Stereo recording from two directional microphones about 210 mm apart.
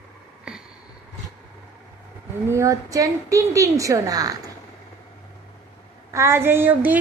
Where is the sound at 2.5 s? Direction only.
15° right (ahead or behind).